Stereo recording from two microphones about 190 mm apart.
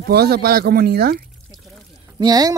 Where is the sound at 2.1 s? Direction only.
20° right (ahead or behind).